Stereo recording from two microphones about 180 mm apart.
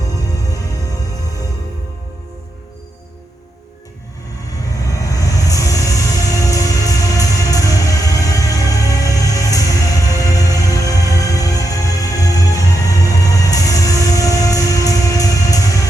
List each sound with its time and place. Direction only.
4.5 s music: 20° left (ahead or behind)